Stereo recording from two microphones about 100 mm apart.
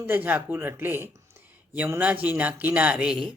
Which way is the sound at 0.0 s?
20° right (ahead or behind).